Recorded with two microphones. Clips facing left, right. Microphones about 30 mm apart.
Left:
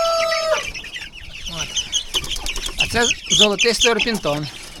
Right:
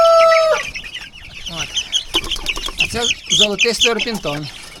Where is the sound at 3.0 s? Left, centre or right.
Centre.